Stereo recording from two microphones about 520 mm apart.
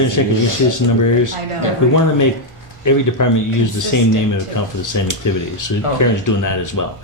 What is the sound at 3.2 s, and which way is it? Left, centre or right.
Speech, left.